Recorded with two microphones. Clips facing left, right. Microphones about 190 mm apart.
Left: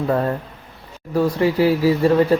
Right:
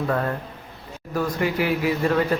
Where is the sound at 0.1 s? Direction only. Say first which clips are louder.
Left 4 dB; 25° left (ahead or behind).